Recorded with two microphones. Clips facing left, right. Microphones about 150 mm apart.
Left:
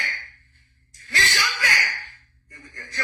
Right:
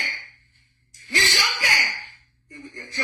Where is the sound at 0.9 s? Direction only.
20° right (ahead or behind).